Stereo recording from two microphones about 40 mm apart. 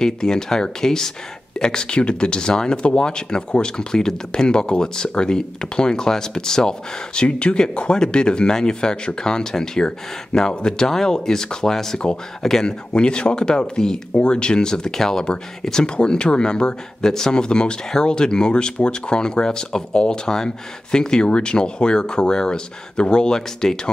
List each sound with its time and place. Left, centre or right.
0.0 s speech: centre
7.2 s speech: left; by 12.0 s centre
12.6 s speech: left